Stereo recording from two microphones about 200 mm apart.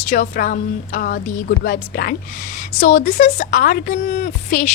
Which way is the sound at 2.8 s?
40° left (ahead or behind).